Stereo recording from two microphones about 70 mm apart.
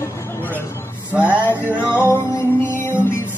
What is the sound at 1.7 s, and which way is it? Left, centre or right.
Music, left.